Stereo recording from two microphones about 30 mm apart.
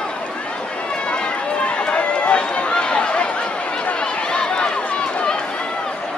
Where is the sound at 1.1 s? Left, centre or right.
Left.